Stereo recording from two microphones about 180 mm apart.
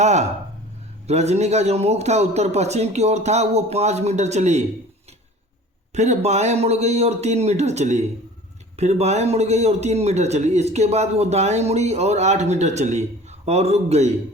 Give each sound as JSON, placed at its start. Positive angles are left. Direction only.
{"t": 0.0, "sound": "a man's voice", "side_deg": -40}
{"t": 5.9, "sound": "a man's voice", "side_deg": -40}